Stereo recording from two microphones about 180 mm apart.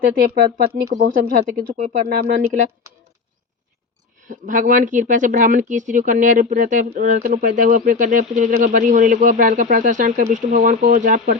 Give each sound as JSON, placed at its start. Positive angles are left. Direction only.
{"t": 0.0, "sound": "speech", "side_deg": -60}
{"t": 4.2, "sound": "speech", "side_deg": -45}